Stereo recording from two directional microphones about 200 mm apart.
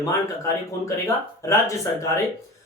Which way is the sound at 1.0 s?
15° left (ahead or behind).